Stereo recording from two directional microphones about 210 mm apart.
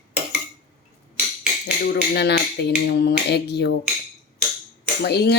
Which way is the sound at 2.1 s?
55° left (ahead or behind).